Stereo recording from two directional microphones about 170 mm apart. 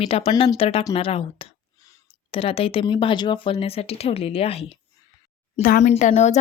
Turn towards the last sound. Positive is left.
turn(degrees=45)  # may be behind; listen again after turning